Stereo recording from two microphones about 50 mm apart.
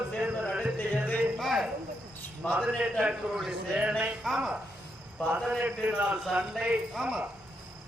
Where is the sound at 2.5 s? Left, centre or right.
Right.